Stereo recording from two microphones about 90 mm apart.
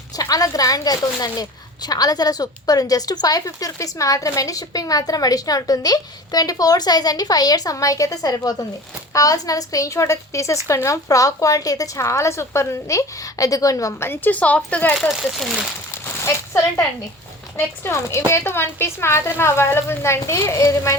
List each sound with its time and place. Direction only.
0.2 s a woman's voice: 45° left (ahead or behind)
14.1 s speech: 15° left (ahead or behind)
14.9 s speech: centre (ahead or behind)
16.0 s speech: 30° left (ahead or behind)
17.8 s a woman's voice: 35° left (ahead or behind)